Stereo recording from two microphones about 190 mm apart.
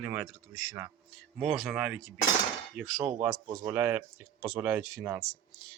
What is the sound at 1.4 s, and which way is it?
Speech, centre (ahead or behind).